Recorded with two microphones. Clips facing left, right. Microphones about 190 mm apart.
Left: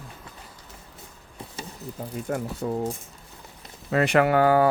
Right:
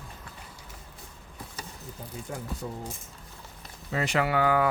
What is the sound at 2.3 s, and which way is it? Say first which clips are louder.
Speech: left 10 dB; 75° left (ahead or behind).